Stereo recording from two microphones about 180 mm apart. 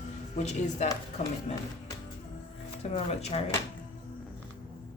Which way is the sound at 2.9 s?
35° left (ahead or behind).